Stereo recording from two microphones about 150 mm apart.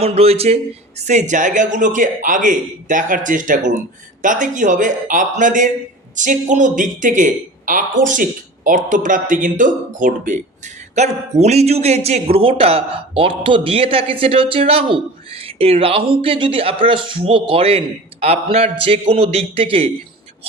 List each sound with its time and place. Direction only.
0.0 s a man's voice: 40° right (ahead or behind); by 10.4 s 60° right (ahead or behind)
10.9 s a man's voice: 50° right (ahead or behind)